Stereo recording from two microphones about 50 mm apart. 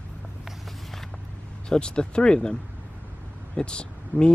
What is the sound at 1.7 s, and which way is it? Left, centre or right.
Speech, centre.